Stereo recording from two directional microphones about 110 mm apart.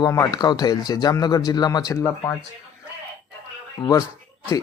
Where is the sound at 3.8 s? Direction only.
40° left (ahead or behind).